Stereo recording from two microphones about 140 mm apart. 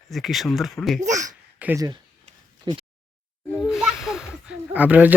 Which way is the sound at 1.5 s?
10° right (ahead or behind).